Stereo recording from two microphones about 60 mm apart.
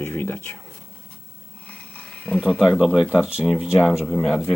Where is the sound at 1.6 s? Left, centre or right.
Left.